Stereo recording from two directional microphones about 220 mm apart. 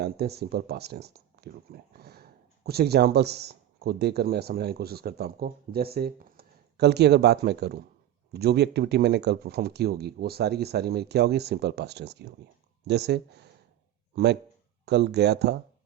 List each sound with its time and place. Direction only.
0.0 s speech: 45° right (ahead or behind)
14.8 s speech: 50° right (ahead or behind)